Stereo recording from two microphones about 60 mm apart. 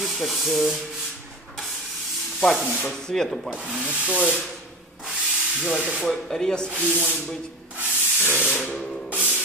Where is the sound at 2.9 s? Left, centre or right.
Centre.